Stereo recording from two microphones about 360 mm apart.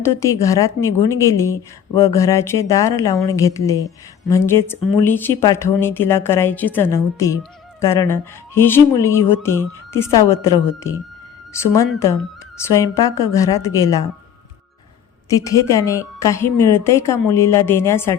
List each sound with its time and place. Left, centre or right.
0.3 s speech: centre
15.3 s speech: centre